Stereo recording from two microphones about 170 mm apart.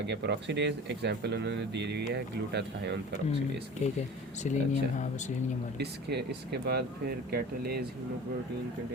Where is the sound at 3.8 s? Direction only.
40° left (ahead or behind).